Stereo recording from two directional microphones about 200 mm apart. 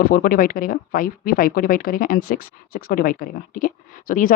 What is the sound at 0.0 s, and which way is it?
Speech, 50° left (ahead or behind).